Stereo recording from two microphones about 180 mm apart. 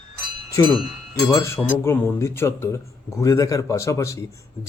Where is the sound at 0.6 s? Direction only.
20° left (ahead or behind).